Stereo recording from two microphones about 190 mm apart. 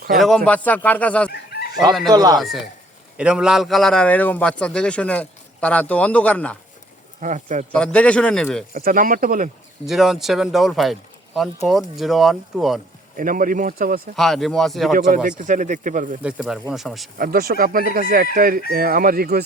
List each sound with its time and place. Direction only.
0.2 s a man's voice: centre (ahead or behind)
2.0 s speech: 20° right (ahead or behind)
2.4 s a man's voice: centre (ahead or behind)
7.2 s speech: 40° right (ahead or behind)
7.7 s speech: 5° left (ahead or behind)
8.7 s speech: 45° right (ahead or behind)
9.8 s a man's voice: centre (ahead or behind)
13.1 s speech: 45° right (ahead or behind)
14.2 s a man's voice: centre (ahead or behind)
15.4 s speech: 40° right (ahead or behind)
16.2 s a man's voice: 5° right (ahead or behind)
17.2 s speech: 50° right (ahead or behind)